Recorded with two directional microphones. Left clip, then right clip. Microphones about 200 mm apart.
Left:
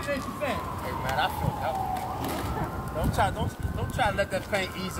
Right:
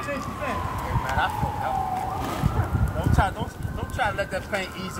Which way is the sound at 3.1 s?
15° left (ahead or behind).